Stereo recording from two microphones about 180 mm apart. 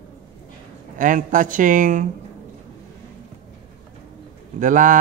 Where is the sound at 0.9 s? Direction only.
45° right (ahead or behind).